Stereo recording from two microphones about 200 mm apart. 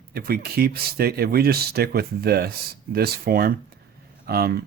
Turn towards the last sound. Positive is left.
turn(degrees=-50)  # may be behind; listen again after turning